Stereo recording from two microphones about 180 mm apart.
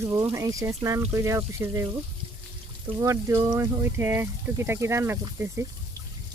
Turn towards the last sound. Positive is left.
turn(degrees=-15)  # may be behind; listen again after turning